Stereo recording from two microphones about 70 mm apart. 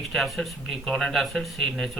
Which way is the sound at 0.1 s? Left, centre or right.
Centre.